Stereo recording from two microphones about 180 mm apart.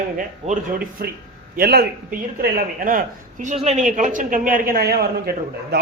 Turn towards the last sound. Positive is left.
turn(degrees=-60)  # may be behind; listen again after turning